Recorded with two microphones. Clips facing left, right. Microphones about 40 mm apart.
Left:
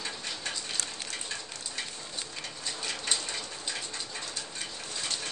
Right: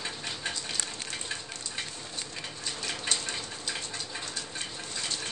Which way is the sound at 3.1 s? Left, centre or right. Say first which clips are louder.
Even; right.